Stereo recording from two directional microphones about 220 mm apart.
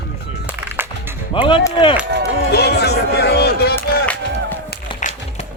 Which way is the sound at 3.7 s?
10° left (ahead or behind).